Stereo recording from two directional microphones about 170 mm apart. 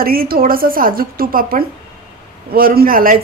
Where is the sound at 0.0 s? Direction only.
60° right (ahead or behind).